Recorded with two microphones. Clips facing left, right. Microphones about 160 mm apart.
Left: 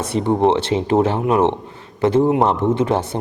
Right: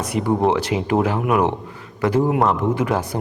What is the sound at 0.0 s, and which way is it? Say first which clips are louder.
A man's voice: left 2 dB; 25° left (ahead or behind).